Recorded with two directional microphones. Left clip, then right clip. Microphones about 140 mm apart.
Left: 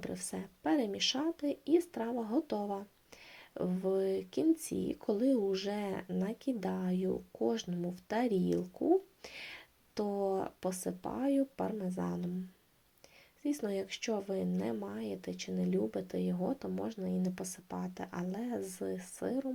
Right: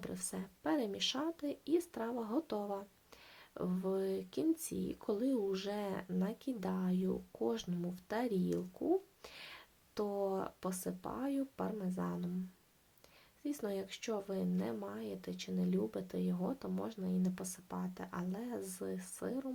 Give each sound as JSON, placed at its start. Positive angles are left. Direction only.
{"t": 0.0, "sound": "speech", "side_deg": 10}
{"t": 13.4, "sound": "speech", "side_deg": 10}